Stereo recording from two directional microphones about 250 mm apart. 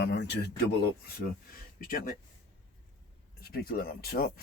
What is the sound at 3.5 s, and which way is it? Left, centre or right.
Speech, left.